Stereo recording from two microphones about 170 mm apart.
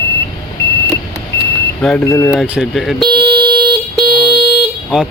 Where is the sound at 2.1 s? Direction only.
15° left (ahead or behind).